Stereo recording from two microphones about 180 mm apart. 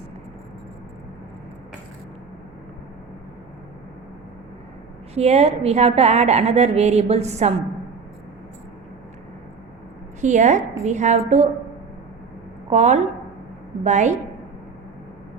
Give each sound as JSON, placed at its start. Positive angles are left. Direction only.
{"t": 5.1, "sound": "a woman's voice", "side_deg": -35}
{"t": 10.2, "sound": "a woman's voice", "side_deg": -40}
{"t": 12.7, "sound": "a woman's voice", "side_deg": -40}